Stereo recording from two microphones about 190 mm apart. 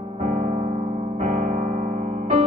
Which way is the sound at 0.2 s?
40° right (ahead or behind).